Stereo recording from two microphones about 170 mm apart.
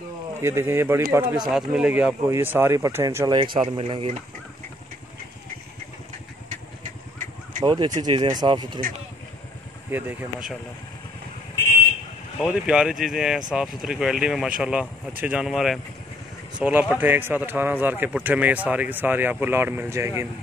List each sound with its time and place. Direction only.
0.4 s a man's voice: 15° right (ahead or behind)
1.2 s speech: 25° right (ahead or behind)
1.7 s a man's voice: 10° right (ahead or behind)
3.5 s speech: 35° right (ahead or behind)
7.6 s speech: 25° right (ahead or behind)
9.8 s speech: 10° right (ahead or behind)
12.4 s a man's voice: 5° right (ahead or behind)